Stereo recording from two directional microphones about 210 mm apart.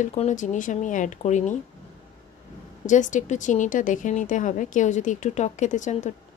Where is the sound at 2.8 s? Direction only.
35° left (ahead or behind).